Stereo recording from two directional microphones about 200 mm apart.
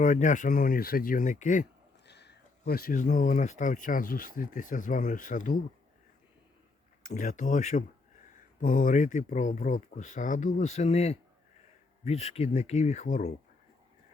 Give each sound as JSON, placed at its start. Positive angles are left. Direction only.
{"t": 0.0, "sound": "speech", "side_deg": 40}
{"t": 2.0, "sound": "speech", "side_deg": 55}
{"t": 7.0, "sound": "speech", "side_deg": 40}